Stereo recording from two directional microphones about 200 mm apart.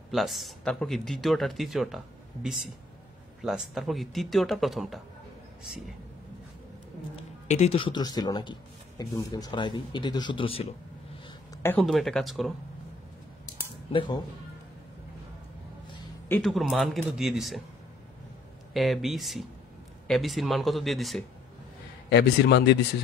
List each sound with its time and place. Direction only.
0.1 s speech: centre (ahead or behind)
7.2 s a man's voice: 35° left (ahead or behind)
11.2 s a sound: 15° left (ahead or behind)
11.8 s speech: centre (ahead or behind)
13.9 s a man's voice: 20° left (ahead or behind)
16.3 s speech: 5° left (ahead or behind)
18.7 s speech: centre (ahead or behind)
22.1 s a man's voice: 60° left (ahead or behind)